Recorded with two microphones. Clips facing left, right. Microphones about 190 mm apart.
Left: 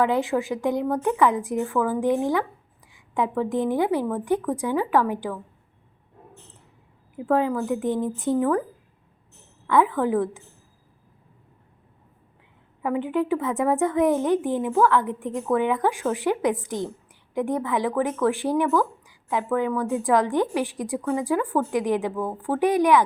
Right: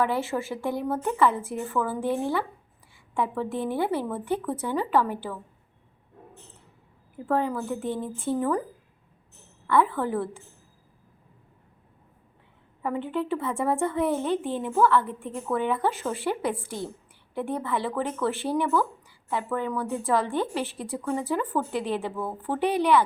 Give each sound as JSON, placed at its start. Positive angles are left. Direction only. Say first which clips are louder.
{"t": 0.0, "sound": "a woman's voice", "louder": "left 4 dB", "side_deg": 15}
{"t": 7.3, "sound": "a woman's voice", "louder": "left 4 dB", "side_deg": 15}
{"t": 9.6, "sound": "a woman's voice", "louder": "left 3 dB", "side_deg": 15}
{"t": 12.8, "sound": "a woman's voice", "louder": "left 4 dB", "side_deg": 15}